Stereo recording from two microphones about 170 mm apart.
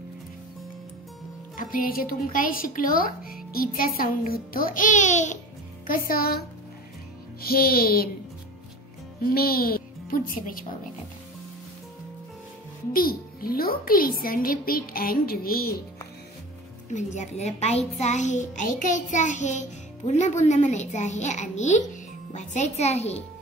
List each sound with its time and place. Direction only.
1.6 s a child's voice: 55° left (ahead or behind)
5.9 s a child's voice: 60° left (ahead or behind)
7.4 s a child's voice: 60° left (ahead or behind)
9.2 s speech: 60° left (ahead or behind)
12.9 s a child's voice: 60° left (ahead or behind)
16.9 s a child's voice: 45° left (ahead or behind)